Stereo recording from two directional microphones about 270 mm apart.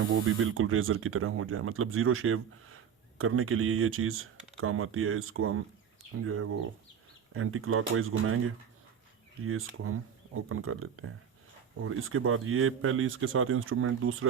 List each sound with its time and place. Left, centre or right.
0.1 s speech: right